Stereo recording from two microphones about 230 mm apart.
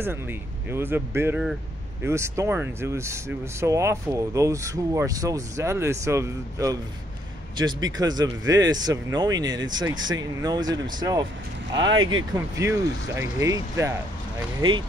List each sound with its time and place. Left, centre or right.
0.7 s speech: centre